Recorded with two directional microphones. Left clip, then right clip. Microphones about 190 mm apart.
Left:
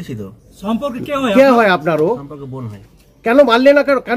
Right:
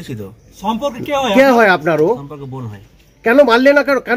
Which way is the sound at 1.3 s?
25° right (ahead or behind).